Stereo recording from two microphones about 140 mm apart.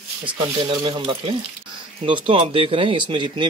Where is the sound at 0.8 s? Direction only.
35° right (ahead or behind).